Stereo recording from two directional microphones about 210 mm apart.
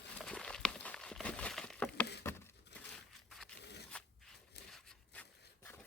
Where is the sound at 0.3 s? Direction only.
5° left (ahead or behind).